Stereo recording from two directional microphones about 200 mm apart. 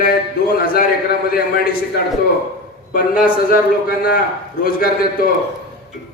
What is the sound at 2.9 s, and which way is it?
A man's voice, 45° left (ahead or behind).